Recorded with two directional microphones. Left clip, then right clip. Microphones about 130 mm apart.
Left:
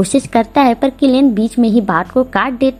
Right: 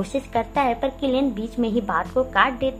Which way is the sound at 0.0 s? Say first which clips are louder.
Left 10 dB; 40° left (ahead or behind).